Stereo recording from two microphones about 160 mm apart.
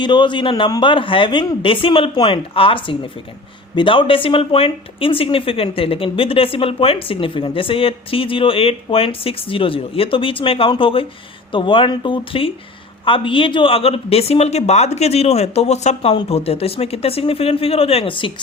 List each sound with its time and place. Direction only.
0.0 s a man's voice: 30° left (ahead or behind)